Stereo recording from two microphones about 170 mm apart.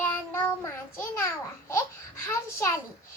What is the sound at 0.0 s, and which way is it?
Child singing, 15° left (ahead or behind).